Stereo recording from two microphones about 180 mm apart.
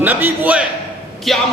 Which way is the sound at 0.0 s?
10° right (ahead or behind).